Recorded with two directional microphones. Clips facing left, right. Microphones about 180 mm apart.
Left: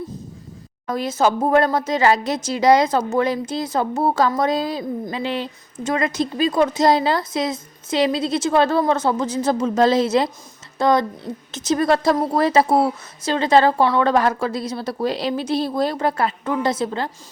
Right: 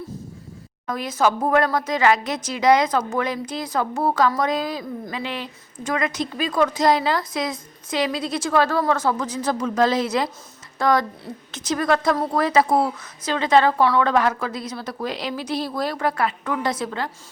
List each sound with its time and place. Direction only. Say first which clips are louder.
0.9 s speech: left 2 dB; 30° left (ahead or behind)